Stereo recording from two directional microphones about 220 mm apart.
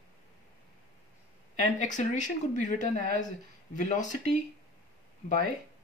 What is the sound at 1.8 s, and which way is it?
Speech, 35° left (ahead or behind).